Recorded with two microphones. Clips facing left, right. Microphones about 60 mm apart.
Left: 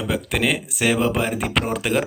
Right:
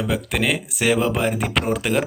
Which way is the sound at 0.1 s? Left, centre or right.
Centre.